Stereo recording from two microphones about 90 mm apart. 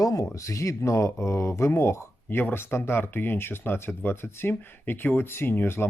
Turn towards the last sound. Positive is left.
turn(degrees=25)  # may be behind; listen again after turning